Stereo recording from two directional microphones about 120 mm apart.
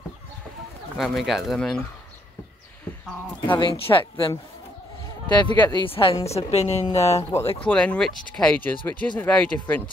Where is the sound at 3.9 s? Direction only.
30° left (ahead or behind).